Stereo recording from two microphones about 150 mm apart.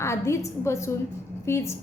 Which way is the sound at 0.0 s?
20° left (ahead or behind).